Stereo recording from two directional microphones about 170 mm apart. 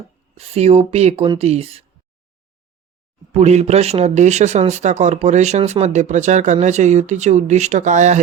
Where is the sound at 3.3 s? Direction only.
40° right (ahead or behind).